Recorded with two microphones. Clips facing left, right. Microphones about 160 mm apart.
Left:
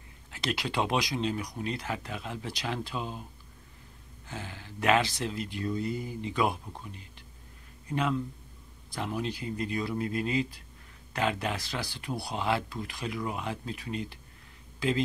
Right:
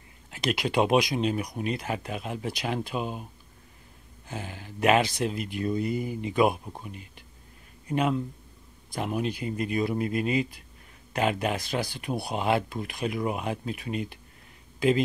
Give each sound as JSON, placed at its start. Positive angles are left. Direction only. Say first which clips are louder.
{"t": 0.3, "sound": "speech", "louder": "right 5 dB", "side_deg": -15}
{"t": 4.3, "sound": "speech", "louder": "right 4 dB", "side_deg": -15}